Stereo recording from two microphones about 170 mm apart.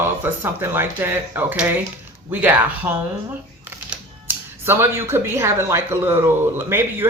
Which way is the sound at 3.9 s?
10° right (ahead or behind).